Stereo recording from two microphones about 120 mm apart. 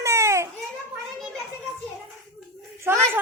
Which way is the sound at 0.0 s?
25° right (ahead or behind).